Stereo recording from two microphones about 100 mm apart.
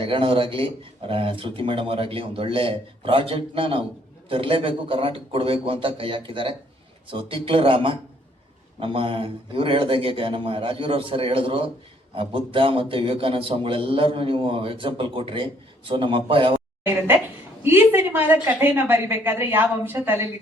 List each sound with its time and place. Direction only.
0.0 s a man's voice: 60° right (ahead or behind)
17.6 s a woman's voice: 25° right (ahead or behind)